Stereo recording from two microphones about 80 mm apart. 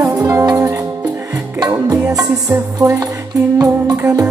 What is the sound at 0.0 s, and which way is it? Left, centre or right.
Music, right.